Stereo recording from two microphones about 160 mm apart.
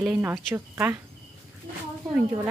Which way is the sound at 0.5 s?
15° right (ahead or behind).